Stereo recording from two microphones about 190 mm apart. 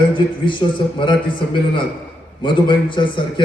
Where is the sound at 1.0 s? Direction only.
25° left (ahead or behind).